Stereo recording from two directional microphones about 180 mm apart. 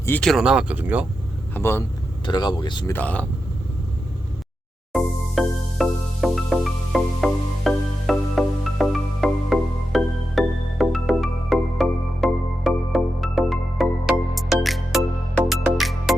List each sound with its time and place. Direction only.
0.0 s speech: 10° left (ahead or behind); by 1.0 s 10° right (ahead or behind)
1.5 s speech: 15° left (ahead or behind)
2.2 s speech: 25° left (ahead or behind)
2.9 s speech: 10° left (ahead or behind)
4.9 s music: centre (ahead or behind)